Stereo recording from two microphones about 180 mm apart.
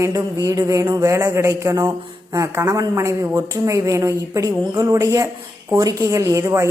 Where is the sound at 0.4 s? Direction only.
15° right (ahead or behind).